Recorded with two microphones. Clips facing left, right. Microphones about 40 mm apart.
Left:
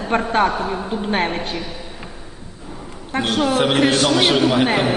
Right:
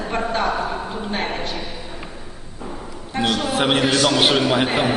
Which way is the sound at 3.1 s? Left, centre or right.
Left.